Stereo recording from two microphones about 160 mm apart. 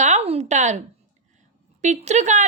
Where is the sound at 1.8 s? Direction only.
45° right (ahead or behind).